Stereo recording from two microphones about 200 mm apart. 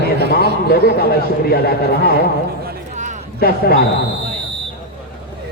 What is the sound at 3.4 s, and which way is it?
Speech, 50° left (ahead or behind).